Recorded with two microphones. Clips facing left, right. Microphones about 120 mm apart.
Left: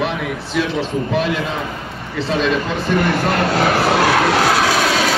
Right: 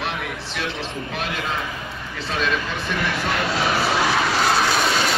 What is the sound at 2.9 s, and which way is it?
Vehicle, 55° left (ahead or behind).